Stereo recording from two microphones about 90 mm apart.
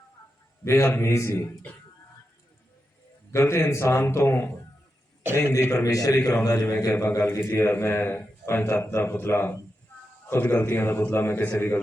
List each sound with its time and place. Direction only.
0.6 s a man's voice: 30° left (ahead or behind)
3.3 s a man's voice: 30° left (ahead or behind)
6.7 s a man's voice: 10° left (ahead or behind)
7.2 s a man's voice: 25° left (ahead or behind)